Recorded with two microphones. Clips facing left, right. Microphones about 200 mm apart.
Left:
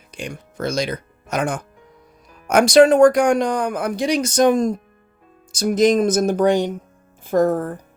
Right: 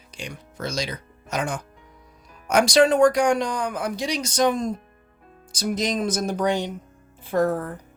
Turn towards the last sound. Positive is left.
turn(degrees=45)  # may be behind; listen again after turning